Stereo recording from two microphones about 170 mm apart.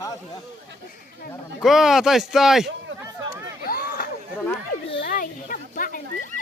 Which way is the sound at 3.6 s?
60° left (ahead or behind).